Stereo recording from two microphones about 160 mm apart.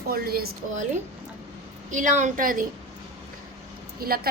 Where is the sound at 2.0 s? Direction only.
50° right (ahead or behind).